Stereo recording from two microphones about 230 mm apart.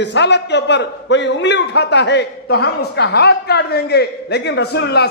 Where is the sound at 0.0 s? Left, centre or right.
Left.